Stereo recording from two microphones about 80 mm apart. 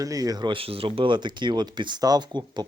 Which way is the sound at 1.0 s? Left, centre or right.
Right.